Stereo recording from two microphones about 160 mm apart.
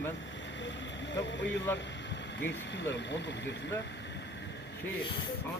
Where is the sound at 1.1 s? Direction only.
90° left.